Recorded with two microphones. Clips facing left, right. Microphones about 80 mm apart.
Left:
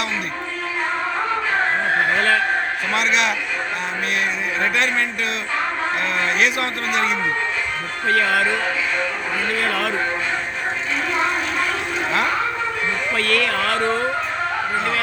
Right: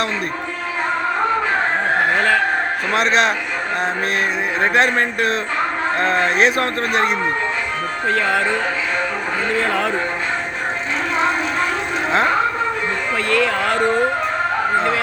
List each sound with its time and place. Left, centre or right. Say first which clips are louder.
2.9 s speech: right 4 dB; right
4.6 s speech: right 5 dB; right
8.0 s speech: left 1 dB; right
9.6 s speech: right 4 dB; right
13.1 s speech: right 3 dB; centre